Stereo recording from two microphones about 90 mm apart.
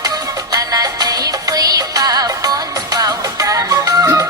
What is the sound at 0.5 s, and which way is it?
Music, 45° right (ahead or behind).